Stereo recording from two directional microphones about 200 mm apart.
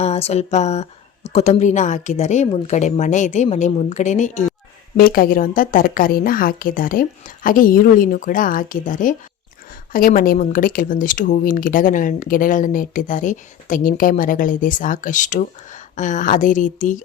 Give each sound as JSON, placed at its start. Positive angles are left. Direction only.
{"t": 0.0, "sound": "speech", "side_deg": 30}
{"t": 4.9, "sound": "a woman's voice", "side_deg": 45}